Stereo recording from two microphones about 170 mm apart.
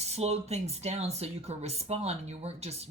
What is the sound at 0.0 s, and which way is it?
Speech, 40° right (ahead or behind).